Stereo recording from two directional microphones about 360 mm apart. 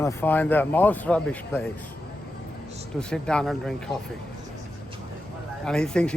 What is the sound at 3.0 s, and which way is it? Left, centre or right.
Speech, centre.